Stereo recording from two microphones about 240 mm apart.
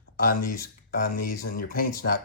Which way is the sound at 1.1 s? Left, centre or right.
Left.